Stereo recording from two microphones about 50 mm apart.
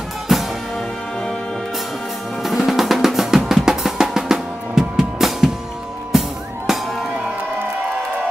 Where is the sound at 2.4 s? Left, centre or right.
Centre.